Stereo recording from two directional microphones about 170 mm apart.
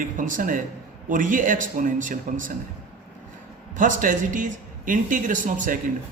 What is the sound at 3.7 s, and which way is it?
Speech, 50° right (ahead or behind).